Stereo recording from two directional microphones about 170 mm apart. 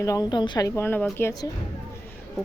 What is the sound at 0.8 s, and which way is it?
Speech, 15° left (ahead or behind).